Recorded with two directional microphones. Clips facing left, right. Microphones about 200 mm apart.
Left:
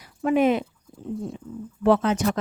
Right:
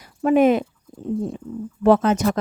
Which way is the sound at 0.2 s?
45° right (ahead or behind).